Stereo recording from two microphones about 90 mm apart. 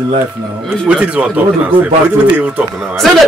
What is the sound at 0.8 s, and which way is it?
Speech, 15° right (ahead or behind).